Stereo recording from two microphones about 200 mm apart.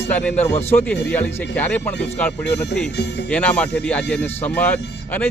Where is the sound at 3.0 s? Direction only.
60° left (ahead or behind).